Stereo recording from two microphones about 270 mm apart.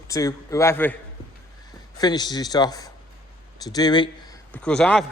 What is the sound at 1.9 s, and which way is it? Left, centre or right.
Speech, centre.